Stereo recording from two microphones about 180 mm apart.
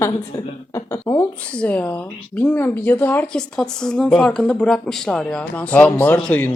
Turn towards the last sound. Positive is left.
turn(degrees=5)  # may be behind; listen again after turning